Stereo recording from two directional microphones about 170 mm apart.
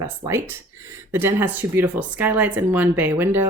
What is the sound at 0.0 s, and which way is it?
Speech, 15° right (ahead or behind).